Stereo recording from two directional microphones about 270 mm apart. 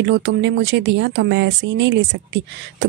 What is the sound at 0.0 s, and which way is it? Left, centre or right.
A woman's voice, right.